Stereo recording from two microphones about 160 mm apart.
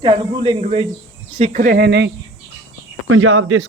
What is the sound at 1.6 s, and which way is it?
Speech, 75° right (ahead or behind).